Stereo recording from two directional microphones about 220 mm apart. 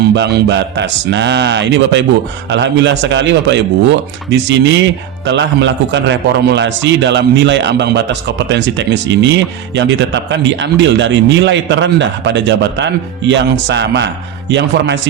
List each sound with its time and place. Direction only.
0.1 s speech: 50° right (ahead or behind)